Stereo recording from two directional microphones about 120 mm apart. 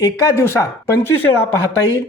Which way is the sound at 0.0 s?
25° left (ahead or behind).